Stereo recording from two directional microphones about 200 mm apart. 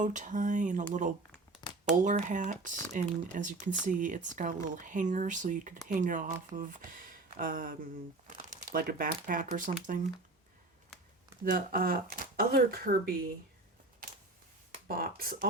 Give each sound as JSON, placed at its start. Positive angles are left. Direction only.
{"t": 0.0, "sound": "speech", "side_deg": -40}
{"t": 1.6, "sound": "a sound", "side_deg": 20}
{"t": 2.0, "sound": "speech", "side_deg": -40}
{"t": 11.4, "sound": "speech", "side_deg": -45}
{"t": 14.0, "sound": "camera", "side_deg": -45}
{"t": 14.8, "sound": "speech", "side_deg": -45}